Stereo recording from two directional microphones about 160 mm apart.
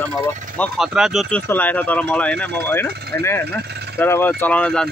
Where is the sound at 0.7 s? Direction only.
Centre (ahead or behind).